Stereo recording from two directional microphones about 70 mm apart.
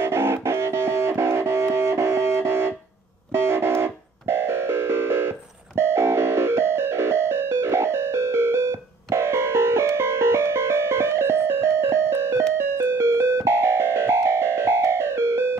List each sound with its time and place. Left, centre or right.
0.0 s music: right